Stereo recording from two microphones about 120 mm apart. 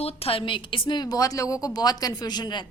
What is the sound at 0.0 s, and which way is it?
A woman's voice, 55° left (ahead or behind).